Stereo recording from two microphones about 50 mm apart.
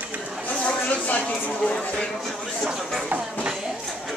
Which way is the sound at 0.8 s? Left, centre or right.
Left.